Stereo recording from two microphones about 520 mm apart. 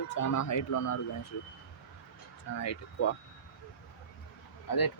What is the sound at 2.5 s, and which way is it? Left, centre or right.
Speech, left.